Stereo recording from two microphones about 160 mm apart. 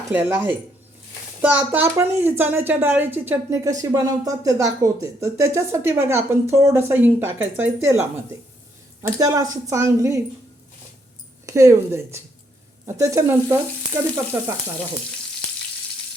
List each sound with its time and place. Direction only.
0.1 s speech: 10° right (ahead or behind)
9.0 s a woman's voice: 20° right (ahead or behind)
11.4 s a woman's voice: 20° right (ahead or behind)